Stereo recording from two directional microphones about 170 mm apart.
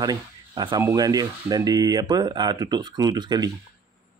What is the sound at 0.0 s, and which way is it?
Speech, 25° right (ahead or behind).